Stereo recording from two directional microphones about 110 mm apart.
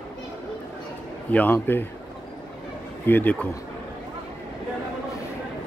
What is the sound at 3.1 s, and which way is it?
Speech, 15° left (ahead or behind).